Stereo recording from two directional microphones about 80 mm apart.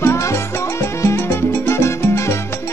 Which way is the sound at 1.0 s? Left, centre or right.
Left.